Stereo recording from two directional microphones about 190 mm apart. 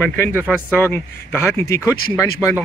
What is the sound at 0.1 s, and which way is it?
Speech, 10° left (ahead or behind).